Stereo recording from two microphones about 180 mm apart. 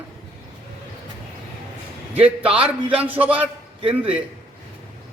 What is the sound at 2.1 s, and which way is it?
A man's voice, 30° right (ahead or behind).